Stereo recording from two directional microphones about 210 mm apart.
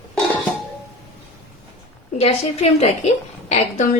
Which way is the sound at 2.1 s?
30° left (ahead or behind).